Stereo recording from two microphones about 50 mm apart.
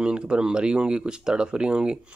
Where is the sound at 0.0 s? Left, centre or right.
Centre.